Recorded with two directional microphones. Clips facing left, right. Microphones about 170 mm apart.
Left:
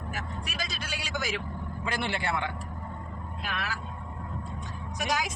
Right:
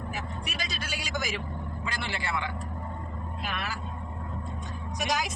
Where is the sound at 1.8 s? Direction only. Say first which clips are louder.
Left 5 dB; 55° left (ahead or behind).